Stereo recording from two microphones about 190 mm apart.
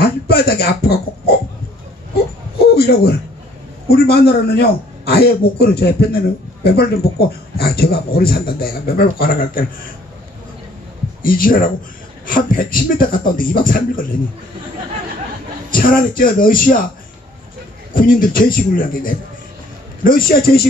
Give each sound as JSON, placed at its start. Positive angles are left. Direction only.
{"t": 0.0, "sound": "speech", "side_deg": 55}
{"t": 2.6, "sound": "a man's voice", "side_deg": 55}
{"t": 11.2, "sound": "a man's voice", "side_deg": 45}
{"t": 15.7, "sound": "a man's voice", "side_deg": 45}
{"t": 17.9, "sound": "a man's voice", "side_deg": 45}